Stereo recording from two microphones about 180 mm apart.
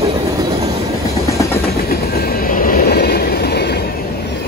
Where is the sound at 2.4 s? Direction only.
50° left (ahead or behind).